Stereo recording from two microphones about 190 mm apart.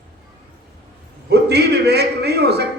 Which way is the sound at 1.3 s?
60° right (ahead or behind).